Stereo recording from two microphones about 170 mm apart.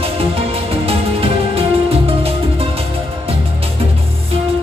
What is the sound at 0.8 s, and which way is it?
Music, 35° right (ahead or behind).